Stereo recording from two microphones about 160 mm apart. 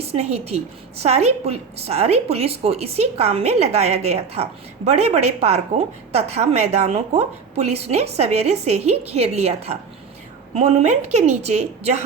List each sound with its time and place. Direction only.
0.0 s a woman's voice: 40° right (ahead or behind)